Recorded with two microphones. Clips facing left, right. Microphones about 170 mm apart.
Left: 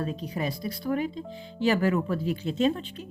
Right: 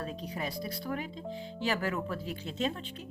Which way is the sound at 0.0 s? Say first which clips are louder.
Left 6 dB; 5° left (ahead or behind).